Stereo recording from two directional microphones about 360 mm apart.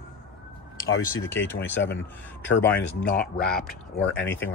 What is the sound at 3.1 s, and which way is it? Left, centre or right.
Speech, left.